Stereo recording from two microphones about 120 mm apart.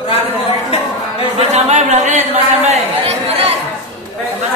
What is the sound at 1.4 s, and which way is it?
Speech, 65° right (ahead or behind).